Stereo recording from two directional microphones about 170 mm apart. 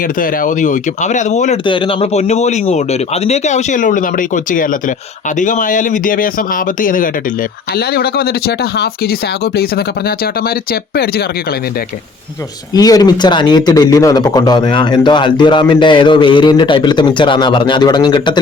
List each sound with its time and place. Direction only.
0.2 s speech: 50° left (ahead or behind)
1.6 s speech: 30° left (ahead or behind); by 7.1 s 55° left (ahead or behind)
7.8 s speech: 65° left (ahead or behind)
12.7 s speech: 20° left (ahead or behind)